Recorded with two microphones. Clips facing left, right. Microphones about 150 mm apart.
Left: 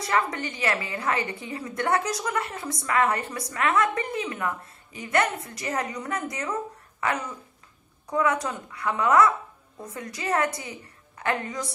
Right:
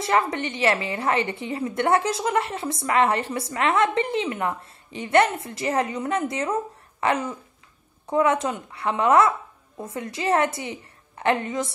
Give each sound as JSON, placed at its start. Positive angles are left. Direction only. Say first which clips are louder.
{"t": 0.0, "sound": "a woman's voice", "louder": "right 3 dB", "side_deg": -25}